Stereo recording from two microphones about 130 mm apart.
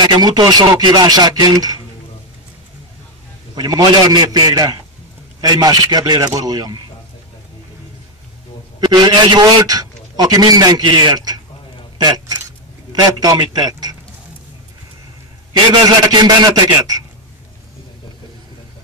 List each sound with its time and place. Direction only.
0.0 s a man's voice: 35° right (ahead or behind)
3.5 s a man's voice: 35° right (ahead or behind)
8.8 s a man's voice: 35° right (ahead or behind)
15.7 s a man's voice: 35° right (ahead or behind)